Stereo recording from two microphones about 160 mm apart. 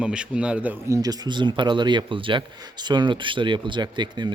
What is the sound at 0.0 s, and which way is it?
A man's voice, 5° right (ahead or behind).